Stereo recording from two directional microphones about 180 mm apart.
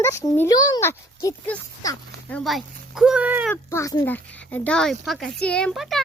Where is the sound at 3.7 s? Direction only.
20° left (ahead or behind); by 6.0 s centre (ahead or behind).